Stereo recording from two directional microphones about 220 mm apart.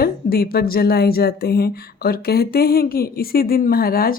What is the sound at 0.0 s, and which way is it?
Speech, 45° left (ahead or behind).